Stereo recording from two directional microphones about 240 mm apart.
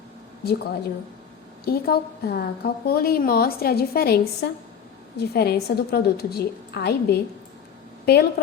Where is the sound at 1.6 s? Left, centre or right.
Left.